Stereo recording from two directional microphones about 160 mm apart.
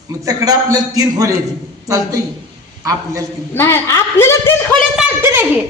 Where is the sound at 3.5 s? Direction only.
15° left (ahead or behind).